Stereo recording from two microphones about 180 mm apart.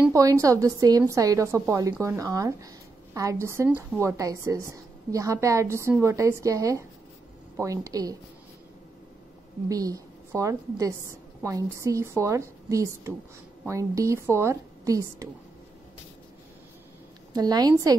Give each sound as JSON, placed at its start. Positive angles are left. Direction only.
{"t": 0.1, "sound": "a woman's voice", "side_deg": -20}
{"t": 9.7, "sound": "a woman's voice", "side_deg": -20}
{"t": 17.3, "sound": "a woman's voice", "side_deg": -20}